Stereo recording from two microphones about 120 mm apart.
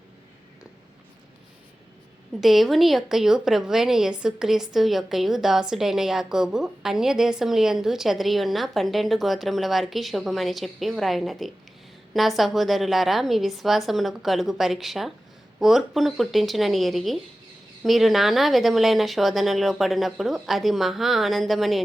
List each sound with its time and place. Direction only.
2.4 s a woman's voice: centre (ahead or behind)